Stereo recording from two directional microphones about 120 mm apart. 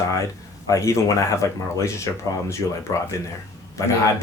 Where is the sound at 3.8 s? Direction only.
25° left (ahead or behind).